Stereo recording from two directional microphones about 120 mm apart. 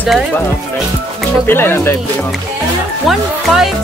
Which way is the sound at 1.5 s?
20° left (ahead or behind).